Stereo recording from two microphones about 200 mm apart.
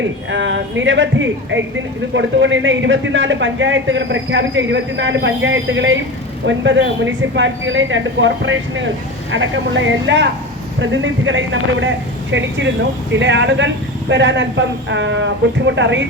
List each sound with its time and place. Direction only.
0.0 s a woman's voice: 65° right (ahead or behind)